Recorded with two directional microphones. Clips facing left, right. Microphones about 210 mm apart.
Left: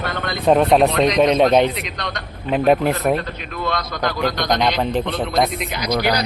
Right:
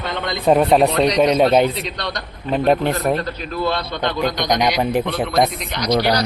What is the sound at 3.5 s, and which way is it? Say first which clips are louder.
A man's voice: right 2 dB; 30° right (ahead or behind).